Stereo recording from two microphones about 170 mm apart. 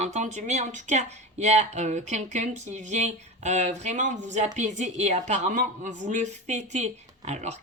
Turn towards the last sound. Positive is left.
turn(degrees=-40)  # may be behind; listen again after turning